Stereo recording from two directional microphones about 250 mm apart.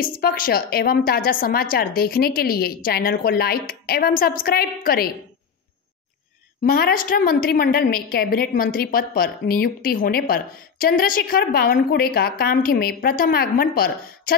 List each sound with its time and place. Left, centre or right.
0.0 s a woman's voice: left
6.6 s a woman's voice: left